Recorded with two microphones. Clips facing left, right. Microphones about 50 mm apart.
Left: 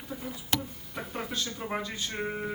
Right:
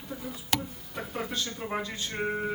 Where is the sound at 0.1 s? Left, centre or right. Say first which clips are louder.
Even; centre.